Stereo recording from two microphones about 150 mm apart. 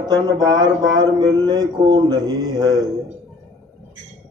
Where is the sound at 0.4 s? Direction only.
30° right (ahead or behind).